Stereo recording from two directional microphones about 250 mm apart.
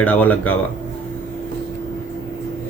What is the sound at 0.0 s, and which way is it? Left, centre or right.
Speech, centre.